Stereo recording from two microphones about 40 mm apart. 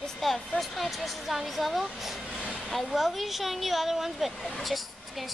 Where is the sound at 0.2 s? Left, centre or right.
Centre.